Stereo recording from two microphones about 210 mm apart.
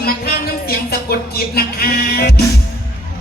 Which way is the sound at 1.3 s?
45° left (ahead or behind).